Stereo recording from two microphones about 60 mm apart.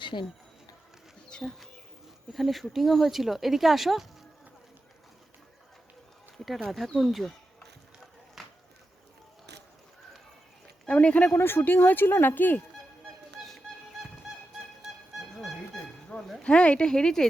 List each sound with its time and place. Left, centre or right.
1.3 s a sound: centre
2.3 s speech: centre
6.3 s speech: centre
8.4 s a sound: centre
10.8 s speech: left
11.3 s speech: left
15.2 s honk: centre
16.4 s speech: centre